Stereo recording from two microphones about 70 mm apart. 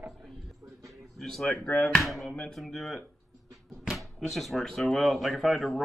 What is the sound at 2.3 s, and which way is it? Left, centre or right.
Speech, centre.